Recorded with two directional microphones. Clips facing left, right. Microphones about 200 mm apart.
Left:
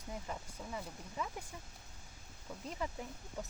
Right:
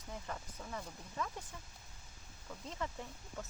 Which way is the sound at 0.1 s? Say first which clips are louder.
Left 1 dB; 10° left (ahead or behind).